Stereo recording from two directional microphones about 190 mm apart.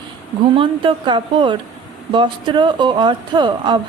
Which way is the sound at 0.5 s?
25° right (ahead or behind).